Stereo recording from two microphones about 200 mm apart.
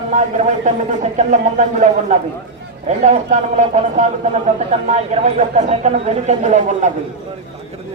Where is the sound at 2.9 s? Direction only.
35° right (ahead or behind).